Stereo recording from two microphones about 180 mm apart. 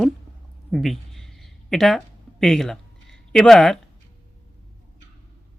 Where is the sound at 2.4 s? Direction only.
Centre (ahead or behind).